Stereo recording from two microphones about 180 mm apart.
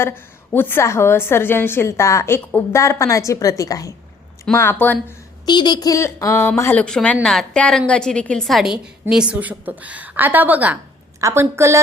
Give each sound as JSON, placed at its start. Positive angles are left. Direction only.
{"t": 0.0, "sound": "a woman's voice", "side_deg": 10}
{"t": 5.5, "sound": "a woman's voice", "side_deg": 25}